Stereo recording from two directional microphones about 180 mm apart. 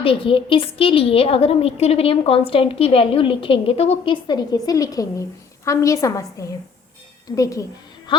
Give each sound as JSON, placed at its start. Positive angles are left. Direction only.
{"t": 0.0, "sound": "a woman's voice", "side_deg": 30}